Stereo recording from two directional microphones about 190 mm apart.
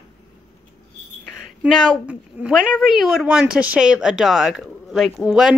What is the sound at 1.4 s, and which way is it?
A woman's voice, centre (ahead or behind).